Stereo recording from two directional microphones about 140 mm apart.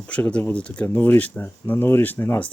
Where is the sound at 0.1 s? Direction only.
10° left (ahead or behind).